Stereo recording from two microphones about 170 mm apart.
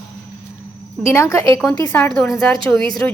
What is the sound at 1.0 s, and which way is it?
A woman's voice, 15° left (ahead or behind).